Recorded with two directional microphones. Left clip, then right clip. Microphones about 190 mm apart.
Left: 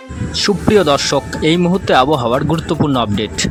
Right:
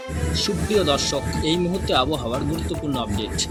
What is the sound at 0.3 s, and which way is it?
Speech, 50° left (ahead or behind).